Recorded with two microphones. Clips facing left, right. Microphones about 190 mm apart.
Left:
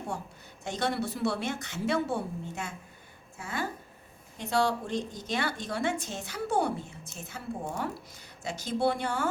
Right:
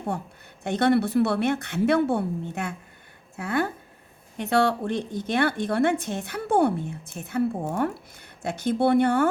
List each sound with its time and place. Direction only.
0.6 s a woman's voice: 60° right (ahead or behind)